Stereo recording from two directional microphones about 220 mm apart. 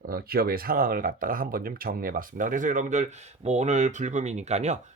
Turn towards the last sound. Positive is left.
turn(degrees=-30)  # may be behind; listen again after turning